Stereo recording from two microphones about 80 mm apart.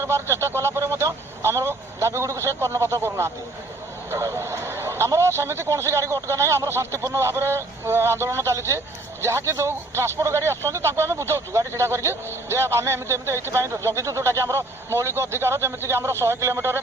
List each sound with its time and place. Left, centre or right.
0.0 s speech: right